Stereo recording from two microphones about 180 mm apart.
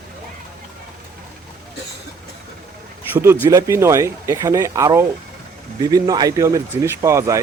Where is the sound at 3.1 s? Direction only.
10° right (ahead or behind).